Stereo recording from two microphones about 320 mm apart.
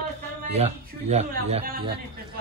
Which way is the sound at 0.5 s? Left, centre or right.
Centre.